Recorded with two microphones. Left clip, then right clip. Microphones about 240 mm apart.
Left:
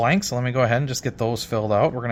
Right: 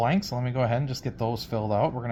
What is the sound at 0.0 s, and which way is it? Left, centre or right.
Speech, left.